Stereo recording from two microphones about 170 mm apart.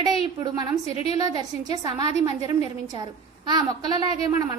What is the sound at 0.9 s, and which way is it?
Speech, 35° left (ahead or behind).